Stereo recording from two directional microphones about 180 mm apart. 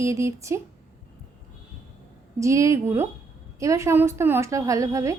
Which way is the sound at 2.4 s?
15° right (ahead or behind).